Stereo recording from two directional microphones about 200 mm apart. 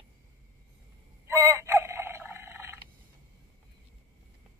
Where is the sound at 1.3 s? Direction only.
15° right (ahead or behind).